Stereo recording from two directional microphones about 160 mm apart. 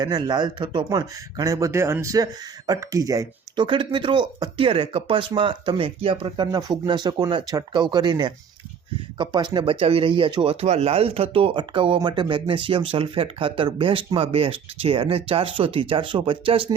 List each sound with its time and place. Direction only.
0.0 s speech: 25° right (ahead or behind)